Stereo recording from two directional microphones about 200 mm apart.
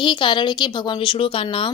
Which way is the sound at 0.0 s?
25° left (ahead or behind).